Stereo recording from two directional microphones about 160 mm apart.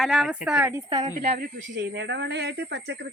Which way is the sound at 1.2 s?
60° right (ahead or behind).